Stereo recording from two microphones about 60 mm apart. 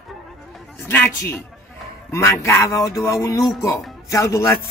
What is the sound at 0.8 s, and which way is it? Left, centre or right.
A man's voice, left.